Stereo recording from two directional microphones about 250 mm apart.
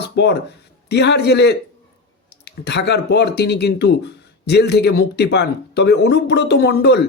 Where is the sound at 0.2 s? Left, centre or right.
Left.